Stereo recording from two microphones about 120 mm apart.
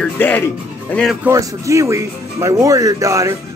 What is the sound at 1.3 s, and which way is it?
A man's voice, 25° right (ahead or behind).